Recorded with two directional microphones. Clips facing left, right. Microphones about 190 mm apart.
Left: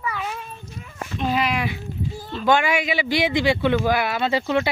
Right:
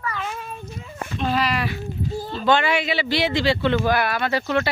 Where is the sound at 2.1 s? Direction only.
30° right (ahead or behind).